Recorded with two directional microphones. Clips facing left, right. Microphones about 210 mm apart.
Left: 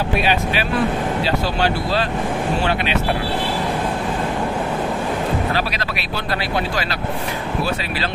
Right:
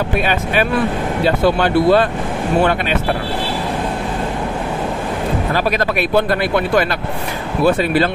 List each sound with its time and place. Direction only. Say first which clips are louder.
0.2 s speech: right 3 dB; 50° right (ahead or behind)
5.5 s speech: right 6 dB; 50° right (ahead or behind)